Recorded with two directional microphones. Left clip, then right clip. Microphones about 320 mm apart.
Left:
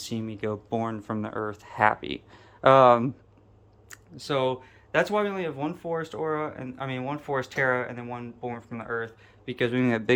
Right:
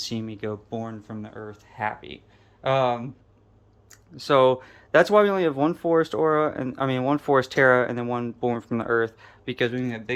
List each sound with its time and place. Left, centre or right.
0.0 s speech: centre
3.9 s speech: centre
9.6 s speech: centre
9.8 s speech: centre